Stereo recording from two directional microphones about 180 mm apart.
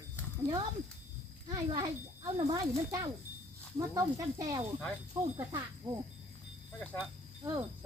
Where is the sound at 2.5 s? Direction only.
20° right (ahead or behind).